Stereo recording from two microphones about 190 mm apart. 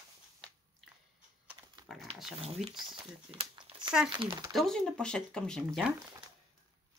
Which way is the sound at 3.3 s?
30° right (ahead or behind).